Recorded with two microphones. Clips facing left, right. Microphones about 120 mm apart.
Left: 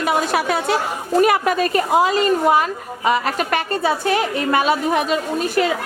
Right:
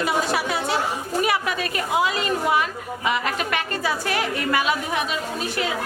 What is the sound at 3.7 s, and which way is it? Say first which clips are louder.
A woman's voice: left 6 dB; 25° left (ahead or behind).